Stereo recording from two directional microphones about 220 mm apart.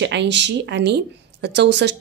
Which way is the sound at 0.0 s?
55° right (ahead or behind).